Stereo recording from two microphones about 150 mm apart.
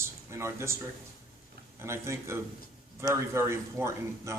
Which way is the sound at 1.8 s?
15° right (ahead or behind).